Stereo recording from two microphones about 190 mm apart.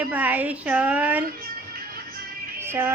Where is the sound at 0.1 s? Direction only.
10° right (ahead or behind).